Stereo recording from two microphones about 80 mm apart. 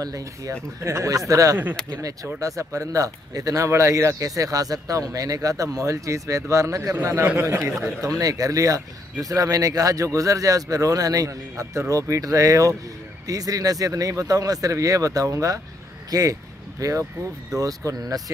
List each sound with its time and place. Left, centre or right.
0.0 s speech: right